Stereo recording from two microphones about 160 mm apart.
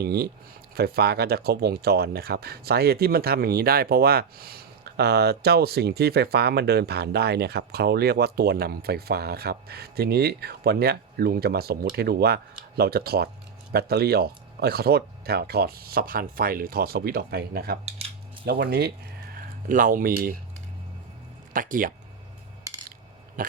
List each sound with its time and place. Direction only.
0.0 s speech: 80° right
19.6 s speech: 60° right (ahead or behind)
21.5 s speech: 60° right (ahead or behind)
23.4 s a sound: 55° right (ahead or behind)